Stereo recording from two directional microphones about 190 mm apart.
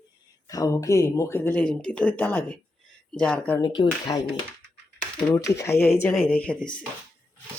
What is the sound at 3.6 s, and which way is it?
Speech, 20° left (ahead or behind).